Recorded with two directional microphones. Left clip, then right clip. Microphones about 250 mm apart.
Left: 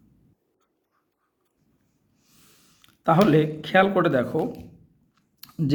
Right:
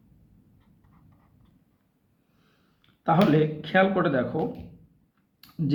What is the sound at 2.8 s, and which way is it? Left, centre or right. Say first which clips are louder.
Speech: left 3 dB; left.